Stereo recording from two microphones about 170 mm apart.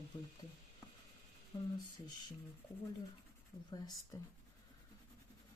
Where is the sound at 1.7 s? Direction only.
25° left (ahead or behind).